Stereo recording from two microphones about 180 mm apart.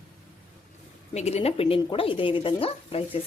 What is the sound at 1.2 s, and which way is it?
Speech, 35° left (ahead or behind).